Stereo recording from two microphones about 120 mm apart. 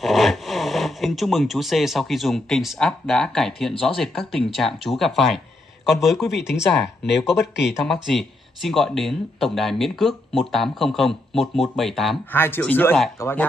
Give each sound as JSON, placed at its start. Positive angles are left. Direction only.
{"t": 0.0, "sound": "speech", "side_deg": 0}
{"t": 7.2, "sound": "speech", "side_deg": 0}
{"t": 12.3, "sound": "speech", "side_deg": 20}